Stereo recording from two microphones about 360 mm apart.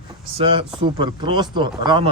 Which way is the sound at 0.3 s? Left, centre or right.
Centre.